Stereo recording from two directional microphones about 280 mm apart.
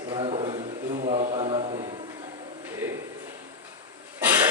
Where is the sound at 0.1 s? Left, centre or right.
Centre.